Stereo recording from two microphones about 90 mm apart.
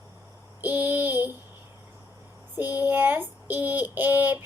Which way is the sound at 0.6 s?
20° right (ahead or behind).